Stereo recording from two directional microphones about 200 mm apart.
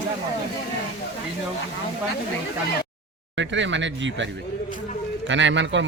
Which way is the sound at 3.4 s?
65° right (ahead or behind).